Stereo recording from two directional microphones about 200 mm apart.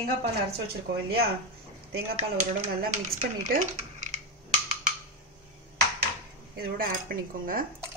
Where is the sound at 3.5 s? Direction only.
35° right (ahead or behind).